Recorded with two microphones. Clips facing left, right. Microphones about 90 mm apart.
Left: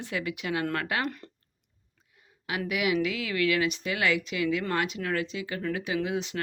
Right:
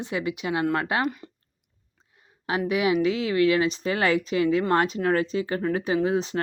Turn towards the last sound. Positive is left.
turn(degrees=-35)  # may be behind; listen again after turning